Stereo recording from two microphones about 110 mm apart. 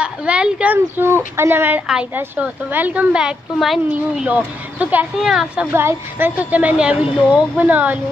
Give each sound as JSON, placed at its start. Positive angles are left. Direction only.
{"t": 0.0, "sound": "a woman's voice", "side_deg": -10}
{"t": 3.9, "sound": "a woman's voice", "side_deg": -15}
{"t": 5.7, "sound": "a woman's voice", "side_deg": -20}